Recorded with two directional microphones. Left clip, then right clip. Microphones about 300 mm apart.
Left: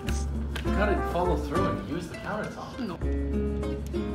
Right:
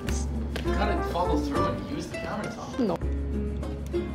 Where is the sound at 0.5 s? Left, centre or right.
Centre.